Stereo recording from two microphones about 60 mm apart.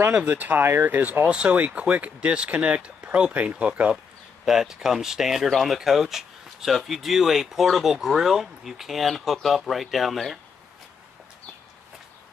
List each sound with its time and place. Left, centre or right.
0.3 s speech: right
1.2 s speech: centre
4.5 s speech: centre